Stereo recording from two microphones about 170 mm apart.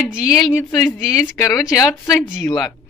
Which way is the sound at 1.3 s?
15° left (ahead or behind).